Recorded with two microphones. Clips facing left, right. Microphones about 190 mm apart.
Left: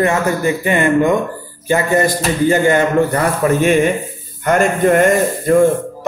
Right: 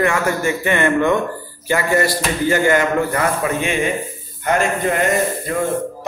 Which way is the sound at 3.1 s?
45° left (ahead or behind).